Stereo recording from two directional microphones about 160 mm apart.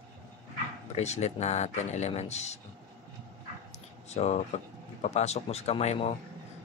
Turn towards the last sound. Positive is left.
turn(degrees=40)  # may be behind; listen again after turning